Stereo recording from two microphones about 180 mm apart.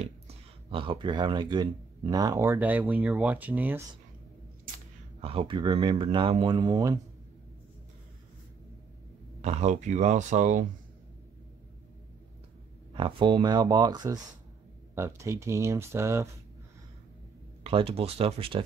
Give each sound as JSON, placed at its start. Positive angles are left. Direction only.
{"t": 0.7, "sound": "speech", "side_deg": -30}
{"t": 5.2, "sound": "speech", "side_deg": -30}
{"t": 9.4, "sound": "speech", "side_deg": -40}
{"t": 12.9, "sound": "speech", "side_deg": -25}
{"t": 17.6, "sound": "speech", "side_deg": -35}